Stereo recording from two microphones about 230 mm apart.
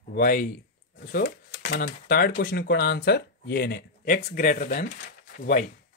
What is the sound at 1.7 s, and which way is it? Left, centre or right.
Speech, left.